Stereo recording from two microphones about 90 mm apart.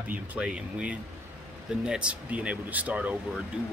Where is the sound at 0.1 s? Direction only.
15° right (ahead or behind).